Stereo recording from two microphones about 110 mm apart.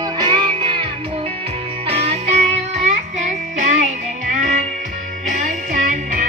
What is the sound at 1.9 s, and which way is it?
Music, 65° right (ahead or behind).